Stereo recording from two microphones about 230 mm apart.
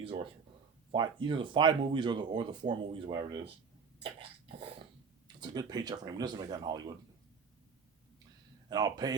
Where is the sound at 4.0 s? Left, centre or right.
Right.